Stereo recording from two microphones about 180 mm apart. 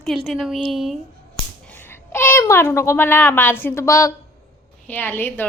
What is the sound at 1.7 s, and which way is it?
A child's voice, 10° left (ahead or behind).